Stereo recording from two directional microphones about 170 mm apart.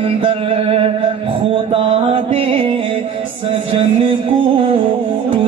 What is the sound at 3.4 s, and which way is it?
Music, 35° right (ahead or behind).